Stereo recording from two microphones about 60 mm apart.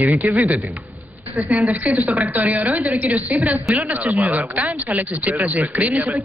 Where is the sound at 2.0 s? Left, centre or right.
Right.